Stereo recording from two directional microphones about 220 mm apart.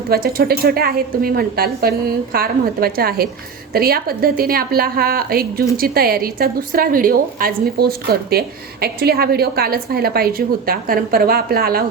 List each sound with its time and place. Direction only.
0.1 s a woman's voice: 45° right (ahead or behind)